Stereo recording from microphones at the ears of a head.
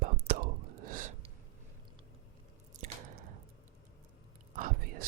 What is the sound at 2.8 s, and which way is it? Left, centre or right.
Squish, right.